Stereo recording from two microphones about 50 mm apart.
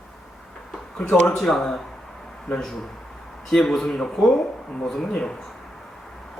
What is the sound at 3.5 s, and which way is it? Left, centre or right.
Speech, centre.